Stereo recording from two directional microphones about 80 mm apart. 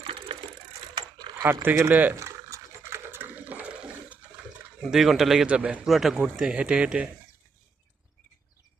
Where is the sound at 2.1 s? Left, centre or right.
Right; by 4.6 s centre.